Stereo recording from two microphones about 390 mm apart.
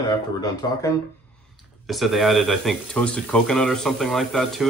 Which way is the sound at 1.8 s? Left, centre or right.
Centre.